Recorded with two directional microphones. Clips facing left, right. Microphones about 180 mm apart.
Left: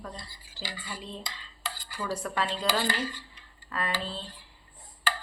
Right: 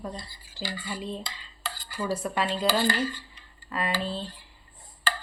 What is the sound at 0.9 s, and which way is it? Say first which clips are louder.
Speech: right 6 dB; 10° right (ahead or behind).